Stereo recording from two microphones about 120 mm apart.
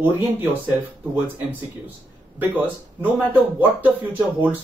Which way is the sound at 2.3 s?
15° right (ahead or behind).